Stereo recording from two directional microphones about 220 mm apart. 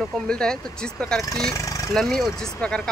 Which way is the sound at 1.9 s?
Centre (ahead or behind).